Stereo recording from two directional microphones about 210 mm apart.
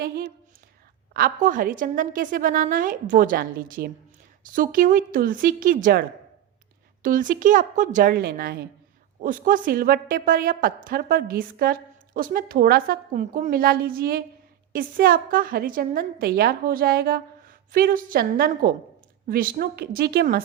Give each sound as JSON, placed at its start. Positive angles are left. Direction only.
{"t": 1.1, "sound": "a woman's voice", "side_deg": -40}